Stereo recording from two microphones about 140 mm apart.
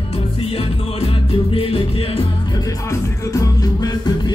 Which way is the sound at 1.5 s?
40° left (ahead or behind).